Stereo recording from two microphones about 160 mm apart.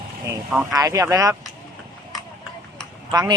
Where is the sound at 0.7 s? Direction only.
20° right (ahead or behind).